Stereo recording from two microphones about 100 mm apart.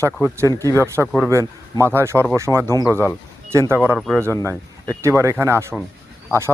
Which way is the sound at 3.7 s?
25° right (ahead or behind).